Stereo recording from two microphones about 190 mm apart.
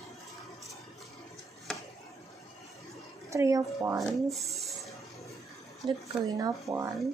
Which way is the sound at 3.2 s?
15° right (ahead or behind).